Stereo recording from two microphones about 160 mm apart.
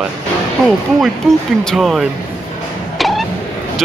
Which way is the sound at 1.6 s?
Centre (ahead or behind).